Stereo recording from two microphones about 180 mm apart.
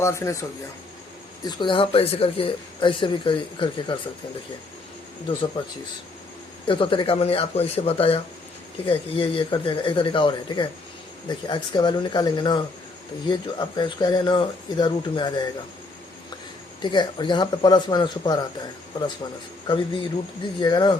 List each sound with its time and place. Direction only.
0.0 s speech: 15° left (ahead or behind)
1.5 s speech: 25° left (ahead or behind)
5.6 s speech: 30° left (ahead or behind)
16.8 s speech: 25° left (ahead or behind)